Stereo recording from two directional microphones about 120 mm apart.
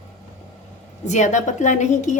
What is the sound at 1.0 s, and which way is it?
A woman's voice, 80° left.